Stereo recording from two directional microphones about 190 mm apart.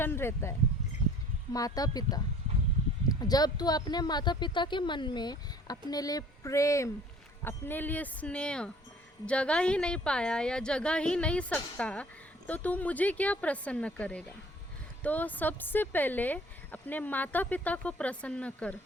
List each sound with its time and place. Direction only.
0.0 s speech: 10° left (ahead or behind)
1.5 s a woman's voice: 20° left (ahead or behind)